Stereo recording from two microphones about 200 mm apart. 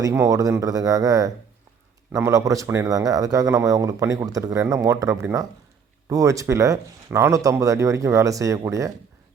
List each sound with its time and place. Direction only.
0.0 s speech: 15° right (ahead or behind)